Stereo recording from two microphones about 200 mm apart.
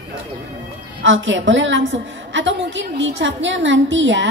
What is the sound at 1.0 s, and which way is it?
A woman's voice, 70° right (ahead or behind).